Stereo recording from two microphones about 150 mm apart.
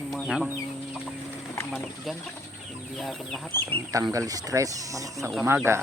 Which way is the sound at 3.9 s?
20° right (ahead or behind).